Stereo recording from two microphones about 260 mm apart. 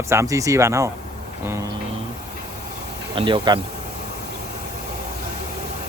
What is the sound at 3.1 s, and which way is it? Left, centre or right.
Speech, centre.